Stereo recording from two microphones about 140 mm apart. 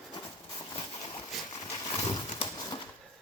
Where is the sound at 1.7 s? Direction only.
30° left (ahead or behind).